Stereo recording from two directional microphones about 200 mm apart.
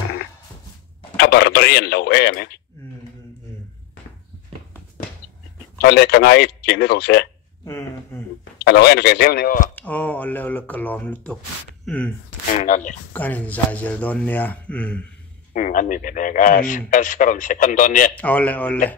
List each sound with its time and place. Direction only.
1.1 s a man's voice: 55° left (ahead or behind)
5.8 s speech: 55° left (ahead or behind)
7.6 s a sound: 10° left (ahead or behind)
8.5 s speech: 55° left (ahead or behind)
9.8 s speech: 10° left (ahead or behind)
12.5 s speech: 40° left (ahead or behind)
13.1 s speech: 10° left (ahead or behind)
15.5 s speech: 40° left (ahead or behind)
18.1 s speech: 10° left (ahead or behind)